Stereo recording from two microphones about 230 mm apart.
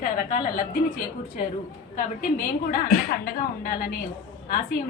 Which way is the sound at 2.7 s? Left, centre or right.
Left.